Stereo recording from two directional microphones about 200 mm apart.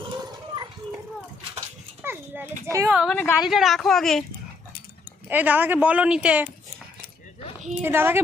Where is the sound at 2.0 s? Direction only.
10° right (ahead or behind).